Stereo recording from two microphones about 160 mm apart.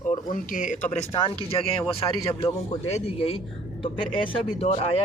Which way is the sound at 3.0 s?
35° left (ahead or behind).